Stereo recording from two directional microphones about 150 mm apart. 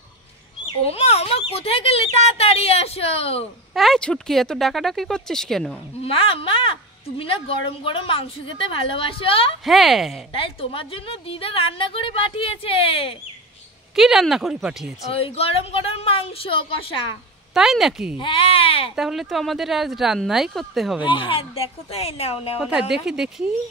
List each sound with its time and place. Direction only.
0.8 s a woman's voice: 45° left (ahead or behind)
3.7 s speech: centre (ahead or behind)
6.0 s a woman's voice: 35° left (ahead or behind)
9.7 s speech: centre (ahead or behind)
10.3 s a woman's voice: 35° left (ahead or behind)
13.9 s speech: centre (ahead or behind)
15.1 s a woman's voice: 40° left (ahead or behind)
17.6 s speech: centre (ahead or behind)
18.2 s a woman's voice: 35° left (ahead or behind)
18.9 s speech: centre (ahead or behind)
21.3 s a woman's voice: 40° left (ahead or behind)
22.6 s speech: 5° right (ahead or behind)